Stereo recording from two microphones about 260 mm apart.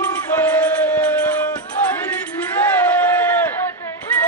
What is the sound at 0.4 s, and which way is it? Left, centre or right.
Music, centre.